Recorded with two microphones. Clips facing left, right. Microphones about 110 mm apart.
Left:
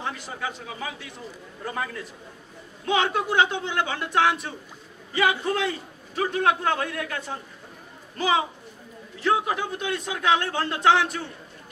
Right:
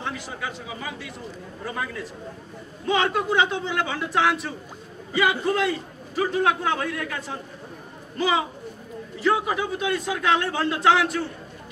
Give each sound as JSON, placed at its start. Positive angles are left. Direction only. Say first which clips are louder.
{"t": 0.0, "sound": "a man's voice", "louder": "even", "side_deg": 0}